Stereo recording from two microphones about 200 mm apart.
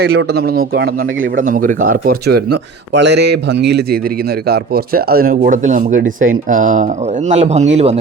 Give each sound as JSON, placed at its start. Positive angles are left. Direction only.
{"t": 0.0, "sound": "a man's voice", "side_deg": -55}